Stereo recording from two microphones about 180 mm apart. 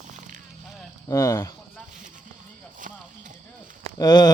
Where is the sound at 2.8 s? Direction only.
45° right (ahead or behind).